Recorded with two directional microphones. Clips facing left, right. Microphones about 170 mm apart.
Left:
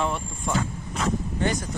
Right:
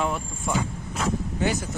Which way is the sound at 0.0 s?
5° right (ahead or behind).